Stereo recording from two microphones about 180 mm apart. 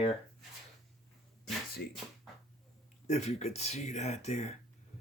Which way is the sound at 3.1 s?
40° left (ahead or behind).